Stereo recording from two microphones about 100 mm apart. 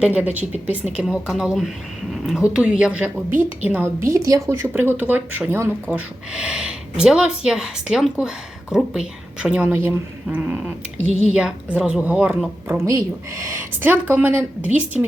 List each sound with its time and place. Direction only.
0.0 s speech: 15° right (ahead or behind)
0.9 s speech: 5° right (ahead or behind)
4.0 s speech: 30° right (ahead or behind)
6.3 s speech: 5° right (ahead or behind)
9.7 s speech: 25° right (ahead or behind)
12.8 s speech: 30° right (ahead or behind)
14.9 s speech: 5° right (ahead or behind)